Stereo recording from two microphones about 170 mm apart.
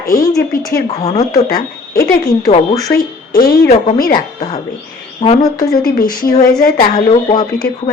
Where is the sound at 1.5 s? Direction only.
60° left (ahead or behind).